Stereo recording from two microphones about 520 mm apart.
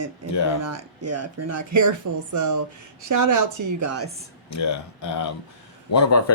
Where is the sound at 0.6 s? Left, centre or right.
Right.